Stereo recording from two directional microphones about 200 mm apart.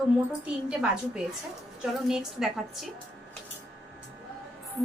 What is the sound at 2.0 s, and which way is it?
Speech, centre (ahead or behind).